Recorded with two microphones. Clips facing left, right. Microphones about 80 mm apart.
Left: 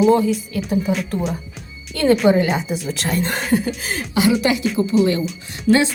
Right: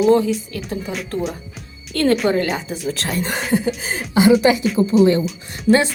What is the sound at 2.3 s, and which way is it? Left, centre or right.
Speech, centre.